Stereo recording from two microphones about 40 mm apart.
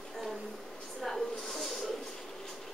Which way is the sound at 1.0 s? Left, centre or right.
Centre.